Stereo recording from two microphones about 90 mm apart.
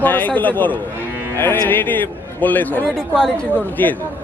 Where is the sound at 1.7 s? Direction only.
20° left (ahead or behind).